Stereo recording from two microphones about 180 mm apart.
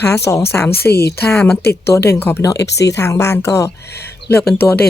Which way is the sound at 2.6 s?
70° left (ahead or behind).